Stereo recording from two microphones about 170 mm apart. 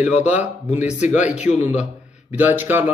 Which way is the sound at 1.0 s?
45° left (ahead or behind).